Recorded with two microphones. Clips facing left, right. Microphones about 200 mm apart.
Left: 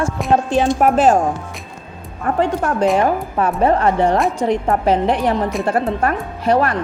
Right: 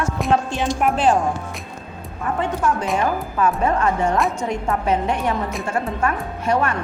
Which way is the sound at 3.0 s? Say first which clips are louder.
Left 3 dB; 40° left (ahead or behind).